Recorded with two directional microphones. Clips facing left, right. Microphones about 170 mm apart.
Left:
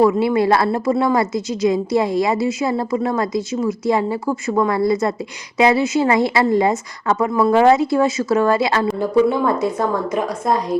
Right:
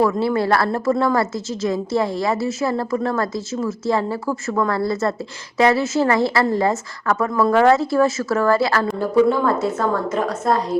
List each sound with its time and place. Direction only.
0.0 s a woman's voice: 15° left (ahead or behind)